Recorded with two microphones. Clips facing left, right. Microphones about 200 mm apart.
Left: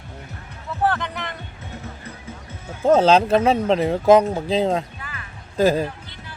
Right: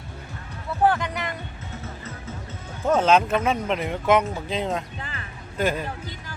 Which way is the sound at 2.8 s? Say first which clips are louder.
Left 4 dB; 35° left (ahead or behind).